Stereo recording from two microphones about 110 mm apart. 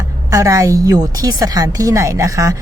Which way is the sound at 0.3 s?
30° right (ahead or behind).